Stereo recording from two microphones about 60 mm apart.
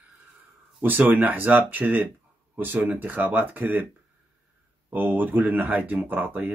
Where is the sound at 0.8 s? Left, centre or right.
Right.